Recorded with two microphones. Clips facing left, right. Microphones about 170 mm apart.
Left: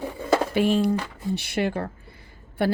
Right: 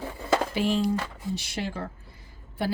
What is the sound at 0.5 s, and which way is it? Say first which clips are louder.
Speech: left 4 dB; 60° left (ahead or behind).